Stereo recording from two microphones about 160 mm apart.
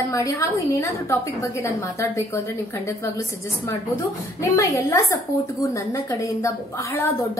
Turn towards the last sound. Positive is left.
turn(degrees=15)  # may be behind; listen again after turning